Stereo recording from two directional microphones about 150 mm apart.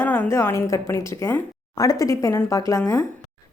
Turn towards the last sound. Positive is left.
turn(degrees=20)  # may be behind; listen again after turning